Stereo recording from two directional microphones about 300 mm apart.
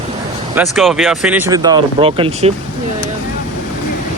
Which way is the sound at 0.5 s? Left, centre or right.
Centre.